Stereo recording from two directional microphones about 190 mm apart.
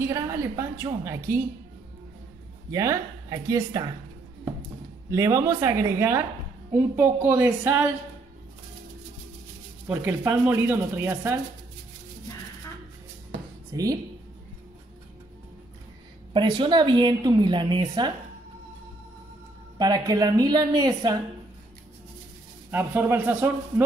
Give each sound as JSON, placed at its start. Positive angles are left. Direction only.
{"t": 0.0, "sound": "a woman's voice", "side_deg": -15}
{"t": 2.7, "sound": "speech", "side_deg": -15}
{"t": 5.1, "sound": "speech", "side_deg": -15}
{"t": 9.8, "sound": "speech", "side_deg": -10}
{"t": 13.7, "sound": "a woman's voice", "side_deg": -20}
{"t": 16.3, "sound": "a woman's voice", "side_deg": -25}
{"t": 19.8, "sound": "a woman's voice", "side_deg": -20}
{"t": 22.7, "sound": "speech", "side_deg": -10}